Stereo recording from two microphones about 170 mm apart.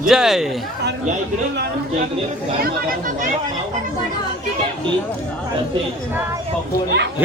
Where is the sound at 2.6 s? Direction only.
55° right (ahead or behind).